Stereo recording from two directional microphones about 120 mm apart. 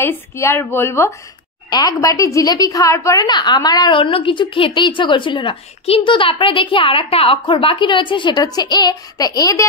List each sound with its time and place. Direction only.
0.0 s a woman's voice: 20° left (ahead or behind)
1.7 s a woman's voice: 30° left (ahead or behind)
4.0 s a woman's voice: 45° left (ahead or behind); by 9.7 s 30° left (ahead or behind)